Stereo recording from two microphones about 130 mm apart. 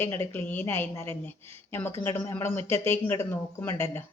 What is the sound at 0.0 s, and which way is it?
A woman's voice, 15° left (ahead or behind).